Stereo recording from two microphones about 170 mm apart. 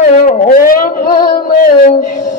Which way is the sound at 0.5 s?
55° left (ahead or behind).